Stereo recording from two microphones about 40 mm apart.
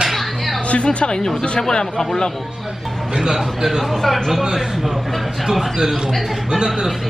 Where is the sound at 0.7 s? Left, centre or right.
Left.